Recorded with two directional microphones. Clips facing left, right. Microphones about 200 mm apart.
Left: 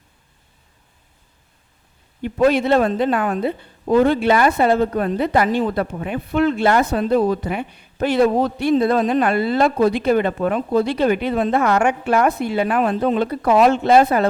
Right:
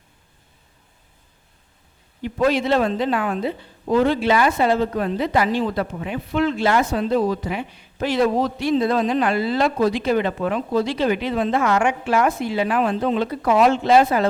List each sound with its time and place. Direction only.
2.5 s a woman's voice: 55° left (ahead or behind)